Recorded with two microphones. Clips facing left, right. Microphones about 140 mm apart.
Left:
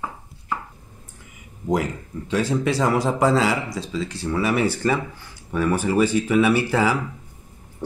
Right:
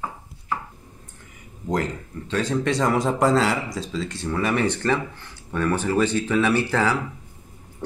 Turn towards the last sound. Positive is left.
turn(degrees=10)  # may be behind; listen again after turning